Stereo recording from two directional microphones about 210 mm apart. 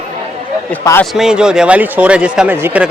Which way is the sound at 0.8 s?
15° left (ahead or behind).